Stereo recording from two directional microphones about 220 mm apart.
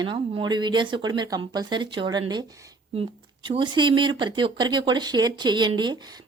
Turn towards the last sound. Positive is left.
turn(degrees=-20)  # may be behind; listen again after turning